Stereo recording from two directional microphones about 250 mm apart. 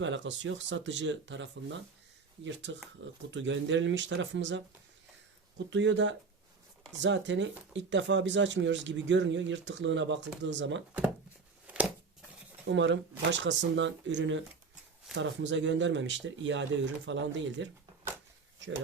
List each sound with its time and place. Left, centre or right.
0.0 s speech: right
11.6 s a sound: centre
12.6 s speech: right